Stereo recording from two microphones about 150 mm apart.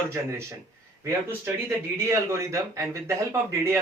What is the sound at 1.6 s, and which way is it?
Speech, 15° right (ahead or behind).